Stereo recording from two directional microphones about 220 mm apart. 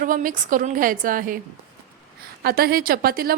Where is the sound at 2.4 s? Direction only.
45° right (ahead or behind).